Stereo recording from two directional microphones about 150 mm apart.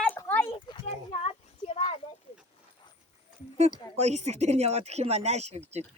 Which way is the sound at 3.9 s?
45° right (ahead or behind).